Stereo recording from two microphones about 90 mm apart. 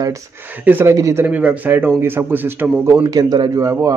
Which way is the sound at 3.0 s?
45° right (ahead or behind).